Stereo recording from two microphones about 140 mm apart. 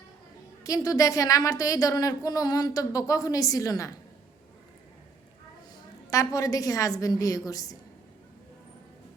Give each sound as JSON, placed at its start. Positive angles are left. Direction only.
{"t": 0.6, "sound": "speech", "side_deg": 25}
{"t": 6.1, "sound": "speech", "side_deg": 25}